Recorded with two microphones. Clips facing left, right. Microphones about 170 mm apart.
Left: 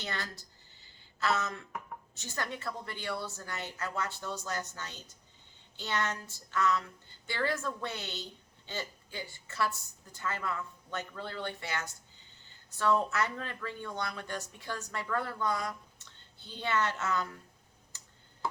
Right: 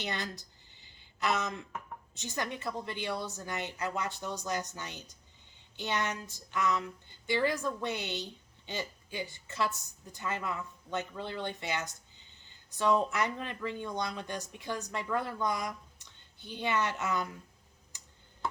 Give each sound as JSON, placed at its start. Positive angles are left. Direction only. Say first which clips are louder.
{"t": 0.0, "sound": "a sound", "louder": "right 3 dB", "side_deg": -20}
{"t": 2.1, "sound": "a woman's voice", "louder": "right 2 dB", "side_deg": -20}
{"t": 17.9, "sound": "tick-tock", "louder": "even", "side_deg": -15}